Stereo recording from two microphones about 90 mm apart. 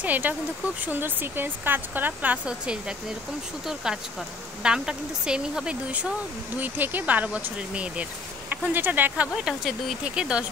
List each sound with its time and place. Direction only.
0.0 s speech: 20° right (ahead or behind)